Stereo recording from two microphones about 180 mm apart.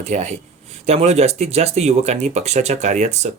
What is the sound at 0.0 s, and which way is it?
Speech, 40° right (ahead or behind).